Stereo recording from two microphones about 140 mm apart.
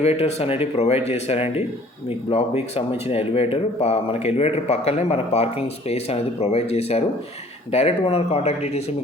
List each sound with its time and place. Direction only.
0.0 s speech: 50° left (ahead or behind)